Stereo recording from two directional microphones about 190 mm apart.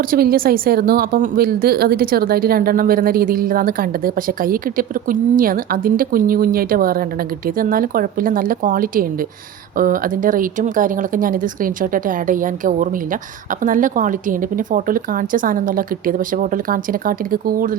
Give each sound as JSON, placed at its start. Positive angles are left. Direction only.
{"t": 0.1, "sound": "a woman's voice", "side_deg": -50}